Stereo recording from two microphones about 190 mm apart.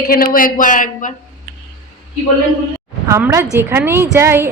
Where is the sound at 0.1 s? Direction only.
50° left (ahead or behind).